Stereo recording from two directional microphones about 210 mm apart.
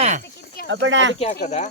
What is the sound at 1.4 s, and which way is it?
Speech, 35° left (ahead or behind).